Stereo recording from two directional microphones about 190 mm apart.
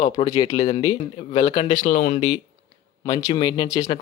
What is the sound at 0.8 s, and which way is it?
Speech, 30° left (ahead or behind).